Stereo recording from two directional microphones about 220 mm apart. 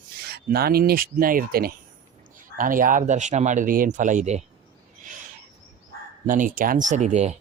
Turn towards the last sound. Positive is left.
turn(degrees=-30)  # may be behind; listen again after turning